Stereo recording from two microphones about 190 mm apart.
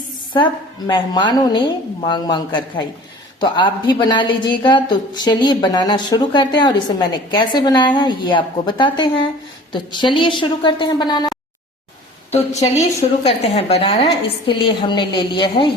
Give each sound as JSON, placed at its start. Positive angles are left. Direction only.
{"t": 0.3, "sound": "a woman's voice", "side_deg": 25}
{"t": 12.5, "sound": "a woman's voice", "side_deg": 35}